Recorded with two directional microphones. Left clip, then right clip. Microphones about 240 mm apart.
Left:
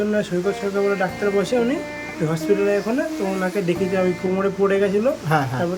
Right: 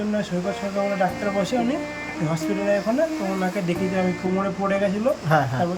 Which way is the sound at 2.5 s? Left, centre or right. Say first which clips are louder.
Left 3 dB; centre.